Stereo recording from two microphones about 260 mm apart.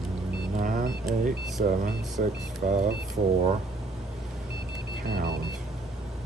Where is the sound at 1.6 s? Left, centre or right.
Right.